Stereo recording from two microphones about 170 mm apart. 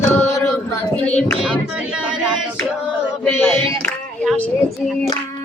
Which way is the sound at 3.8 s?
5° left (ahead or behind).